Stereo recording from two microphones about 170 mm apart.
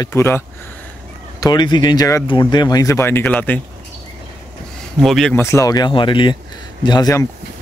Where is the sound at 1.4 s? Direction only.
25° left (ahead or behind).